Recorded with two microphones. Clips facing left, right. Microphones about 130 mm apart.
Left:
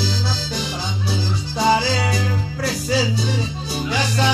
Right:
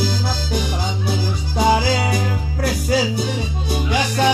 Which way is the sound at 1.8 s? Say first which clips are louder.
Right 2 dB; 50° right (ahead or behind).